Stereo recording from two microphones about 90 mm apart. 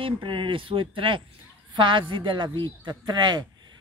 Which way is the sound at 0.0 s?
65° right (ahead or behind).